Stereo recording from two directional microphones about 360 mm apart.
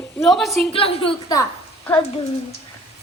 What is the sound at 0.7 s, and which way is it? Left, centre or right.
Speech, centre.